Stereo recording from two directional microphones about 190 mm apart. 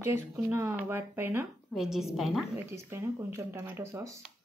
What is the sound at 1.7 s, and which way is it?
Speech, centre (ahead or behind).